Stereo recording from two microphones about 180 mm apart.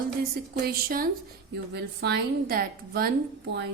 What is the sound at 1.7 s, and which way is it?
Speech, 65° right (ahead or behind).